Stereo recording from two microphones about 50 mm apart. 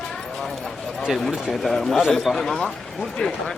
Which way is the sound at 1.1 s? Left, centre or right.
Centre.